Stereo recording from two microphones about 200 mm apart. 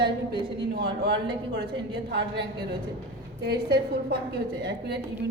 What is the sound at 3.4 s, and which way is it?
A woman's voice, 55° right (ahead or behind).